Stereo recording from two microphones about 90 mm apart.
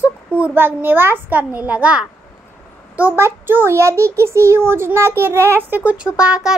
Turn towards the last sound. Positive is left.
turn(degrees=-10)  # may be behind; listen again after turning